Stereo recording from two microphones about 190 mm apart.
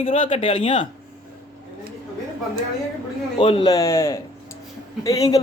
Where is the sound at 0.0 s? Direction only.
30° left (ahead or behind).